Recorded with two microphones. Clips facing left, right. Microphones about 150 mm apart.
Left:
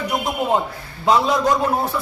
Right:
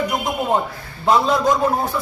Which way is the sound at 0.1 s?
5° left (ahead or behind).